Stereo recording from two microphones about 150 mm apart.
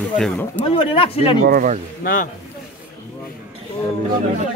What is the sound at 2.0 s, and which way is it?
Speech, 70° left (ahead or behind).